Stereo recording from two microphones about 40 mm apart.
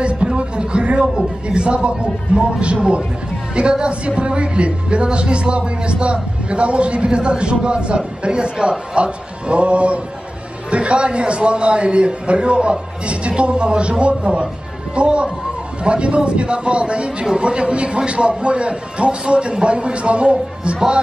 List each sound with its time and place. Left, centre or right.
0.4 s a man's voice: right